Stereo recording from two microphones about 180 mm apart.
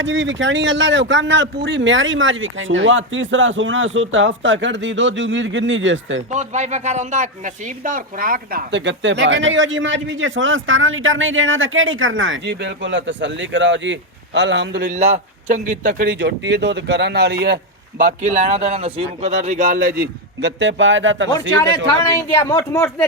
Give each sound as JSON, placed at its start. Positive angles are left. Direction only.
{"t": 0.0, "sound": "a man's voice", "side_deg": -90}
{"t": 6.3, "sound": "a man's voice", "side_deg": -40}
{"t": 14.8, "sound": "a man's voice", "side_deg": -45}
{"t": 20.6, "sound": "a man's voice", "side_deg": -90}
{"t": 22.0, "sound": "speech", "side_deg": 15}